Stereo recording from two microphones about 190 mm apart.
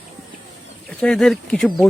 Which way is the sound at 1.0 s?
5° left (ahead or behind).